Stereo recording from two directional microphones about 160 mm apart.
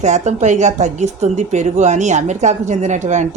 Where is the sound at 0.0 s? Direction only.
45° right (ahead or behind).